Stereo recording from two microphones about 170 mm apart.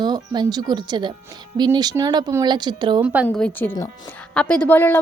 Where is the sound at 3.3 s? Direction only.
10° left (ahead or behind).